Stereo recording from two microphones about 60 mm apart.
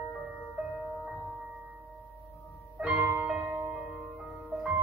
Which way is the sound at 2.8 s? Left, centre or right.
Right.